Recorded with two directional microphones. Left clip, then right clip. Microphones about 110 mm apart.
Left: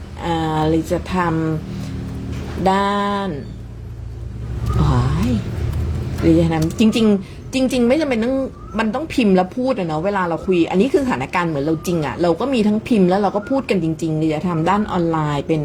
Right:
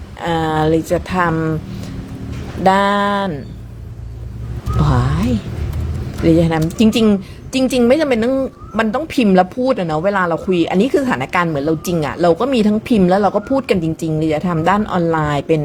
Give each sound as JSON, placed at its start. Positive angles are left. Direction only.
{"t": 0.2, "sound": "a woman's voice", "side_deg": -70}
{"t": 2.6, "sound": "a woman's voice", "side_deg": -70}
{"t": 4.8, "sound": "vehicle", "side_deg": -70}
{"t": 6.2, "sound": "a woman's voice", "side_deg": -75}